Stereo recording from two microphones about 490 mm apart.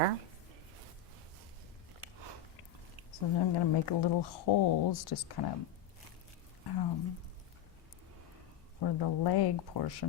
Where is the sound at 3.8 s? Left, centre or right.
Left.